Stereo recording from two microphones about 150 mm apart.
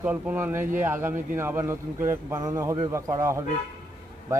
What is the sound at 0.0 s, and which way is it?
A man's voice, 10° right (ahead or behind).